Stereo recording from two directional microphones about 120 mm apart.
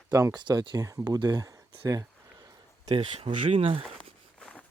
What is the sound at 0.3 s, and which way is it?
Speech, 40° right (ahead or behind).